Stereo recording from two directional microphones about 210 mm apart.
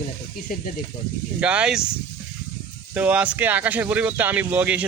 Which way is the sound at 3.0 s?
5° right (ahead or behind).